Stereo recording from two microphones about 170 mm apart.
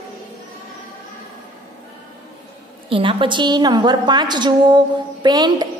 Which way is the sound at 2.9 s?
30° right (ahead or behind).